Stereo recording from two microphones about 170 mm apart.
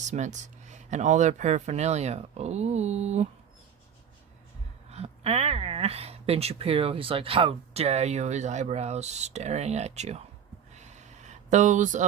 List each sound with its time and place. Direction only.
0.0 s speech: 45° right (ahead or behind)
4.9 s speech: 35° right (ahead or behind)
10.7 s a sound: 45° right (ahead or behind)